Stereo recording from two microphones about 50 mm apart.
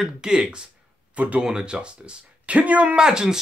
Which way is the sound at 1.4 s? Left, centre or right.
Centre.